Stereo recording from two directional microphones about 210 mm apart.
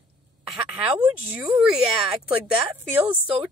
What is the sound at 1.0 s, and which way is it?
Speech, 5° right (ahead or behind).